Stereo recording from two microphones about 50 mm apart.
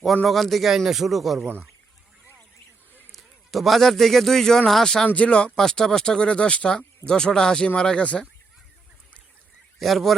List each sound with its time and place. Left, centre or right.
0.3 s speech: centre
3.1 s a man's voice: centre
5.0 s speech: left
5.5 s speech: centre
9.7 s speech: centre